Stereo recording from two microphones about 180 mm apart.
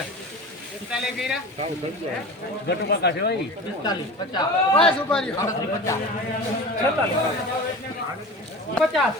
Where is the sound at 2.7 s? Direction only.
70° left (ahead or behind).